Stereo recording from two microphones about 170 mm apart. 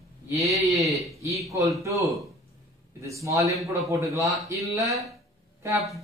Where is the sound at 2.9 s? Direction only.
20° right (ahead or behind).